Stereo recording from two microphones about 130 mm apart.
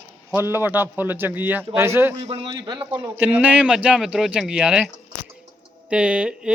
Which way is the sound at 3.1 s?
10° right (ahead or behind).